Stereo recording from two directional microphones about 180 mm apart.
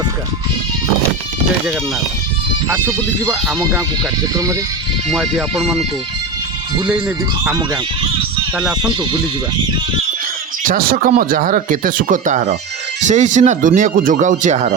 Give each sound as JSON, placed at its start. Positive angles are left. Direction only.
{"t": 2.6, "sound": "speech", "side_deg": -10}
{"t": 5.1, "sound": "speech", "side_deg": 0}
{"t": 7.5, "sound": "speech", "side_deg": -20}
{"t": 10.6, "sound": "speech", "side_deg": -50}